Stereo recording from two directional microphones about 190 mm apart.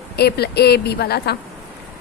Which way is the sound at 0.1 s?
60° left (ahead or behind).